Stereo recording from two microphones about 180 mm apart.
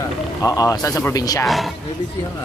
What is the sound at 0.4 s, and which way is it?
Speech, 20° left (ahead or behind).